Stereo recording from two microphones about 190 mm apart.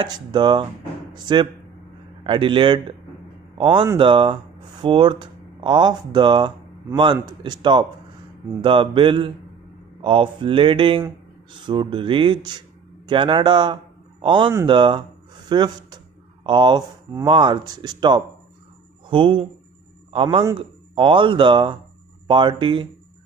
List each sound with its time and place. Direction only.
0.0 s a man's voice: 25° right (ahead or behind)